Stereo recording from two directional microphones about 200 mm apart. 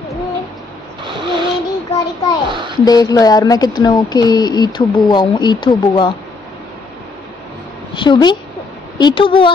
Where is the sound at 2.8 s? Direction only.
20° left (ahead or behind).